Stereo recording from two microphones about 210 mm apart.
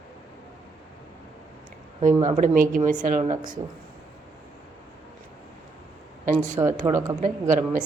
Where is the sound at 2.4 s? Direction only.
40° right (ahead or behind).